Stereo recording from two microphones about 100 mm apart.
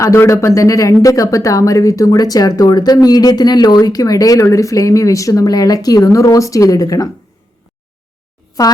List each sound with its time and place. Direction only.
0.0 s speech: 30° left (ahead or behind)
8.6 s speech: 40° left (ahead or behind)